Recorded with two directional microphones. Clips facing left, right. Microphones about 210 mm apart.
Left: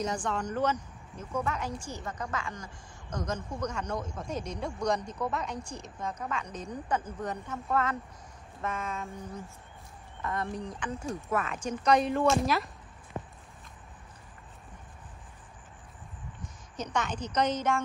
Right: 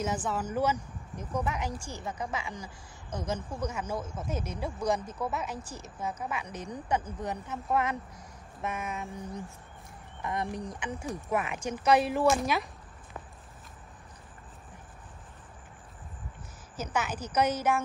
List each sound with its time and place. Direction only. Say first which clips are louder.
0.0 s speech: even; 5° right (ahead or behind)
13.2 s horse: left 6 dB; 25° left (ahead or behind)
16.7 s speech: even; 5° right (ahead or behind)